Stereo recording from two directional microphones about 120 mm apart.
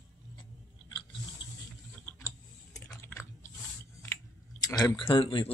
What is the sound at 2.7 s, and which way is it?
Chewing, 25° left (ahead or behind).